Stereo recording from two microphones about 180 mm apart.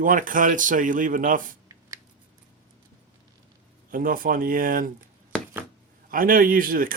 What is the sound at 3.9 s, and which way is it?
Speech, 50° right (ahead or behind).